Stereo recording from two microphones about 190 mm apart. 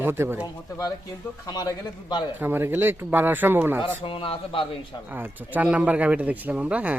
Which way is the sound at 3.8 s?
30° left (ahead or behind).